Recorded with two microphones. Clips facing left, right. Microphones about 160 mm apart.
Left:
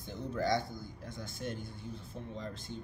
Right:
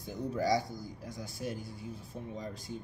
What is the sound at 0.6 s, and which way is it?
Speech, 35° right (ahead or behind).